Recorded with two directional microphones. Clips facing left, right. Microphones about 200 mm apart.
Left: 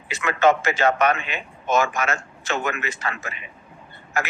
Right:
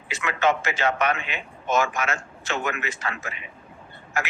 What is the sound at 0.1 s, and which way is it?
A man's voice, 40° left (ahead or behind).